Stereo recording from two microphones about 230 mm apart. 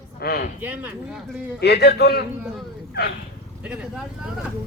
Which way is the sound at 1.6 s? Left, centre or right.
Left.